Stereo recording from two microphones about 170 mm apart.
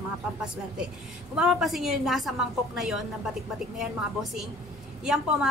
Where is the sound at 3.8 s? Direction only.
Centre (ahead or behind).